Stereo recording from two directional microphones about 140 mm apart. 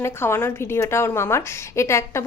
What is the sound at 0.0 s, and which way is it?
A woman's voice, 15° left (ahead or behind).